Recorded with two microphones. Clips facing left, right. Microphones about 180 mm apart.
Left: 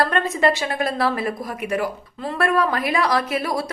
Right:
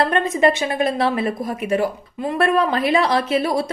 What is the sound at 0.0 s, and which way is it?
A woman's voice, 20° right (ahead or behind).